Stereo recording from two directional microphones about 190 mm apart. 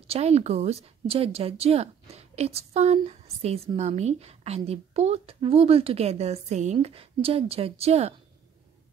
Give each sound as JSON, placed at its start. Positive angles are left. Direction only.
{"t": 0.0, "sound": "speech", "side_deg": -35}